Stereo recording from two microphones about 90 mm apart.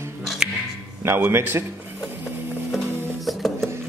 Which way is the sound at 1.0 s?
30° right (ahead or behind).